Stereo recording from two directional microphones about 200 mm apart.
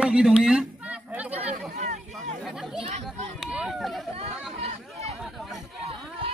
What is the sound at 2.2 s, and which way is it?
Chatter, centre (ahead or behind).